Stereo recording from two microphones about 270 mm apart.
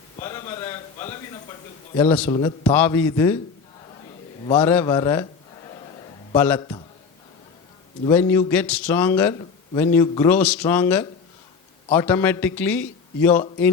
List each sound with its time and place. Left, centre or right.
0.3 s a sound: centre
2.0 s a man's voice: centre
2.3 s a man's voice: centre
2.7 s a man's voice: centre
4.6 s a man's voice: centre
6.3 s a man's voice: centre
8.0 s a man's voice: centre